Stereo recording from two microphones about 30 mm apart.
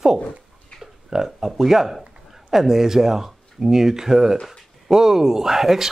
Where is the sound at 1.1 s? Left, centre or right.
Centre.